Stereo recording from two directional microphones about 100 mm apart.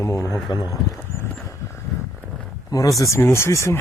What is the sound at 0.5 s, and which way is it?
Speech, 40° left (ahead or behind).